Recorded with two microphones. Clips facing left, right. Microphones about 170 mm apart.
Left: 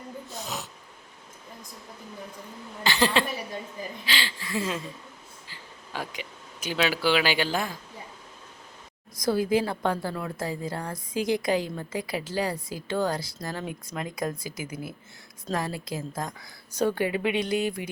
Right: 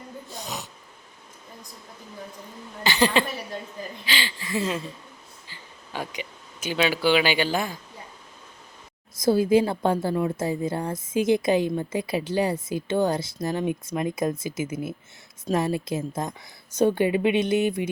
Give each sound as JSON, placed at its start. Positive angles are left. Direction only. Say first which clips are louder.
{"t": 0.4, "sound": "snort", "louder": "right 1 dB", "side_deg": 0}
{"t": 2.8, "sound": "speech", "louder": "right 2 dB", "side_deg": 0}
{"t": 5.5, "sound": "a sound", "louder": "right 1 dB", "side_deg": 0}
{"t": 6.7, "sound": "speech", "louder": "right 3 dB", "side_deg": 0}
{"t": 9.1, "sound": "a woman's voice", "louder": "right 5 dB", "side_deg": -25}